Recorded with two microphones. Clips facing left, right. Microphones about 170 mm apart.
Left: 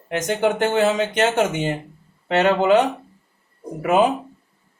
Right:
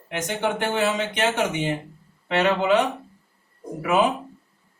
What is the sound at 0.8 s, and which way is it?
A man's voice, 45° left (ahead or behind).